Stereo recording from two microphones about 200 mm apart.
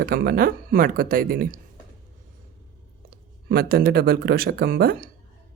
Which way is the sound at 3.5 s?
50° right (ahead or behind).